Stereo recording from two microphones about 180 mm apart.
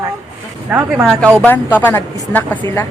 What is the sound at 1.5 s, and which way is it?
A woman's voice, 10° left (ahead or behind).